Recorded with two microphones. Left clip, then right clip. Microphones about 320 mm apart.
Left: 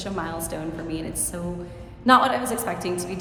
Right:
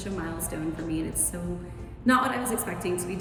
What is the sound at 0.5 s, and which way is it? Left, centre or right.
A woman's voice, centre.